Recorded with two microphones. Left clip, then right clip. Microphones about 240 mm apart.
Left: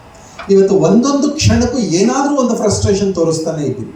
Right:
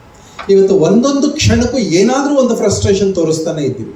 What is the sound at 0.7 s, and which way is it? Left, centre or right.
Speech, centre.